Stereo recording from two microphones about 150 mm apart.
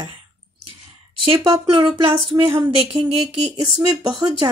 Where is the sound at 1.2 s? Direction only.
35° right (ahead or behind).